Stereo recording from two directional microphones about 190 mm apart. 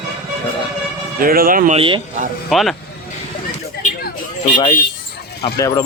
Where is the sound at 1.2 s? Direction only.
50° right (ahead or behind).